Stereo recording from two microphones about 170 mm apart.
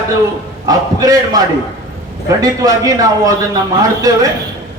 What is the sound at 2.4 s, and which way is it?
Speech, 20° right (ahead or behind).